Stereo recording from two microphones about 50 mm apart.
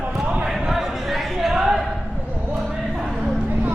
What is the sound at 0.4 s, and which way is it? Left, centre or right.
Basketball bounce, centre.